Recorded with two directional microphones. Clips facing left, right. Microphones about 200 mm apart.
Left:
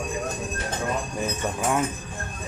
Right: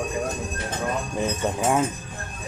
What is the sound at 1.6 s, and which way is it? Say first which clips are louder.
Speech: right 2 dB; 25° right (ahead or behind).